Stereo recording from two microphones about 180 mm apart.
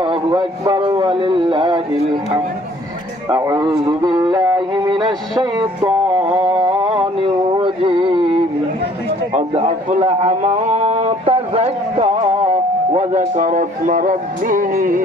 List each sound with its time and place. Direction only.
0.0 s a man's voice: 25° right (ahead or behind)
3.3 s a man's voice: 20° right (ahead or behind)
5.4 s a sound: 25° right (ahead or behind)
9.3 s a man's voice: 35° right (ahead or behind); by 15.0 s 50° right (ahead or behind)